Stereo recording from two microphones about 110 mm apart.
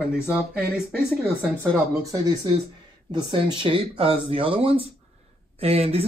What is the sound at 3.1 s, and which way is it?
Speech, 50° right (ahead or behind).